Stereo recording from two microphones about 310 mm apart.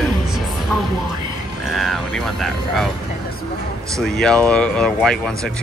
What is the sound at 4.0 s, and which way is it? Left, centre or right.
Speech, centre.